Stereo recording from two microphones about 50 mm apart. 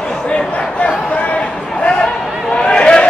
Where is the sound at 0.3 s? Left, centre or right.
Centre.